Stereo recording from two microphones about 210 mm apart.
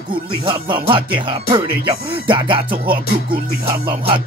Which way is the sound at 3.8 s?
25° right (ahead or behind).